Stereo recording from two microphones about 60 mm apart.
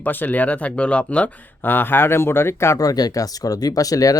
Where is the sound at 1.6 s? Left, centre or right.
Left.